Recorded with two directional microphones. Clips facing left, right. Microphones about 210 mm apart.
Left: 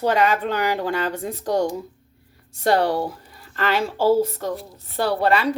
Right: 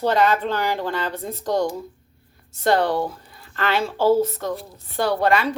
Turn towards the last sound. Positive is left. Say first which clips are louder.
# even
turn(degrees=35)  # may be behind; listen again after turning